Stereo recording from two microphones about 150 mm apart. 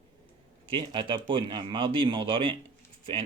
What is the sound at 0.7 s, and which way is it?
Speech, 35° right (ahead or behind).